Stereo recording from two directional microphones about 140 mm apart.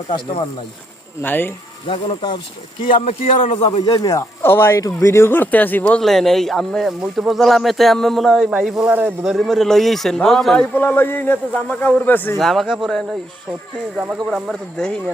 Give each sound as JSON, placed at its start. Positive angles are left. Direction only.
{"t": 1.2, "sound": "a man's voice", "side_deg": 15}
{"t": 1.9, "sound": "speech", "side_deg": 35}
{"t": 3.2, "sound": "a man's voice", "side_deg": 65}
{"t": 3.6, "sound": "speech", "side_deg": 45}
{"t": 3.8, "sound": "speech", "side_deg": 30}
{"t": 4.2, "sound": "speech", "side_deg": 15}
{"t": 9.3, "sound": "a man's voice", "side_deg": 0}
{"t": 12.4, "sound": "speech", "side_deg": 0}